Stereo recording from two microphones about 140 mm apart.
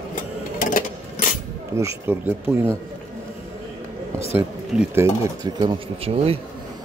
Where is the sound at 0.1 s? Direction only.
70° left (ahead or behind).